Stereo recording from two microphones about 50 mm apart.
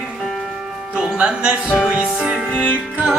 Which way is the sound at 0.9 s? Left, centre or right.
Centre.